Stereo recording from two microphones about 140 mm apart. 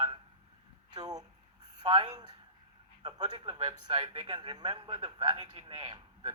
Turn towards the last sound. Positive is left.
turn(degrees=-40)  # may be behind; listen again after turning